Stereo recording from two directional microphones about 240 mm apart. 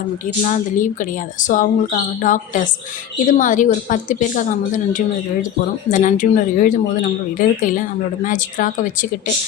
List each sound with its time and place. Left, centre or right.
0.4 s speech: left